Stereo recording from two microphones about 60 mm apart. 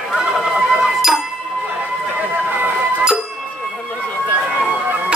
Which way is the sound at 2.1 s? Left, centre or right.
Right.